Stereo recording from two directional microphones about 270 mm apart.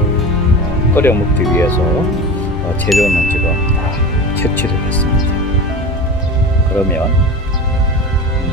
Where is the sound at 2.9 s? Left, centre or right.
Centre.